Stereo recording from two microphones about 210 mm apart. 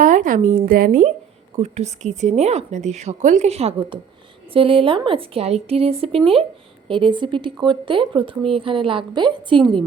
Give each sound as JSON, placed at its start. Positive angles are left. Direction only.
{"t": 0.0, "sound": "a woman's voice", "side_deg": -40}